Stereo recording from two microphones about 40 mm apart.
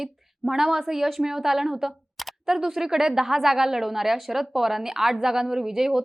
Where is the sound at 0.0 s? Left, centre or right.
Centre.